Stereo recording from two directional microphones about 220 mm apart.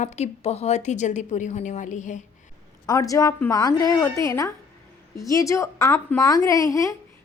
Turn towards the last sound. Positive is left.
turn(degrees=15)  # may be behind; listen again after turning